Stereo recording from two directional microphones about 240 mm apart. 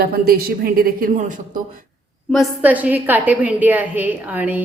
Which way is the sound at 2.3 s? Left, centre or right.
Centre.